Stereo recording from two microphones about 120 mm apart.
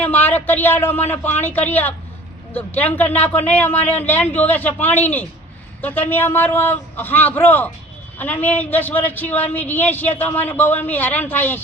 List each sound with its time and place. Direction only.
0.0 s a man's voice: 15° left (ahead or behind)